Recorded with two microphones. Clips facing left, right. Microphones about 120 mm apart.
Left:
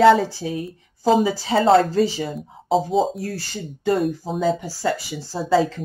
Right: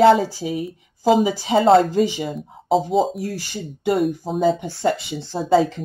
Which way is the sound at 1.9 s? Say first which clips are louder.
Even; 15° right (ahead or behind).